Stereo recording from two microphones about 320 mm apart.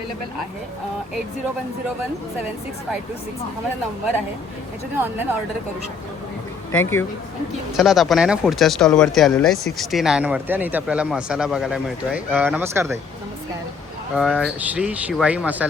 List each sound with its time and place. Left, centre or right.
4.9 s speech: centre
6.7 s speech: centre
14.2 s speech: centre